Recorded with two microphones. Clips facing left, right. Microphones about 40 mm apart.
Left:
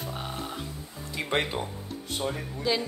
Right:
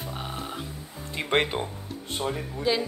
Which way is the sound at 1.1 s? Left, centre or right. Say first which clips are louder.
Right 3 dB; right.